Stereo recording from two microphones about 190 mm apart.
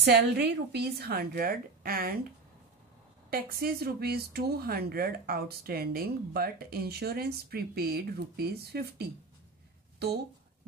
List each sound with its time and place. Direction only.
0.0 s a woman's voice: 60° right (ahead or behind)
3.3 s speech: 50° right (ahead or behind)